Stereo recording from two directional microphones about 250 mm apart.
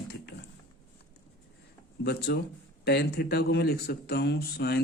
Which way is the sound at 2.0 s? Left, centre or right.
Left.